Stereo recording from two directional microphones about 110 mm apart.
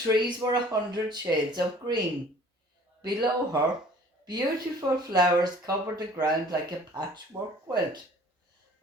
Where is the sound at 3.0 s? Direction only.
40° right (ahead or behind).